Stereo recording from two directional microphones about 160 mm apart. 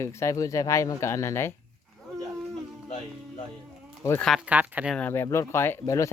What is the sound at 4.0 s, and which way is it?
Speech, 15° left (ahead or behind).